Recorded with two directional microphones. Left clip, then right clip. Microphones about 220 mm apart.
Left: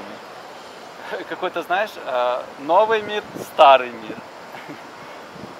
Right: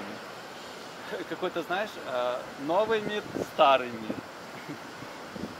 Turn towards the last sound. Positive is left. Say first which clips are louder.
# left 10 dB
turn(degrees=-10)  # may be behind; listen again after turning